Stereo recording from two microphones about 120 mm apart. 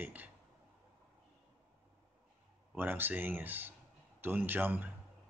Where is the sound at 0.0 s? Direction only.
15° right (ahead or behind).